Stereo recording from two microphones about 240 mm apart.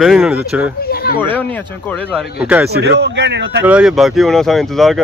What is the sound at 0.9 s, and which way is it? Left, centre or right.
Speech, left.